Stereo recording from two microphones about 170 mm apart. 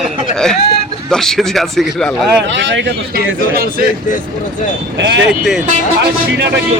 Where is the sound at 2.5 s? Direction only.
90° right; by 3.7 s 65° right (ahead or behind).